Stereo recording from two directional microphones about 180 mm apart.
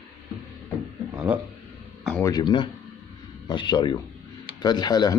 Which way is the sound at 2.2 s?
20° left (ahead or behind).